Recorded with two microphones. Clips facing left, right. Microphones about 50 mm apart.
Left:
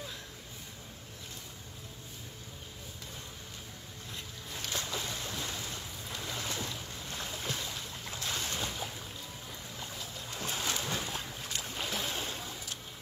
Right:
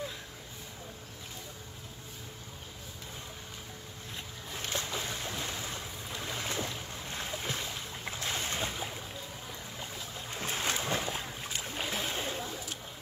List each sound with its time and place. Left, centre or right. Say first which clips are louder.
4.6 s boat: right 1 dB; right
11.1 s boat: right 2 dB; centre
11.9 s boat: right 2 dB; right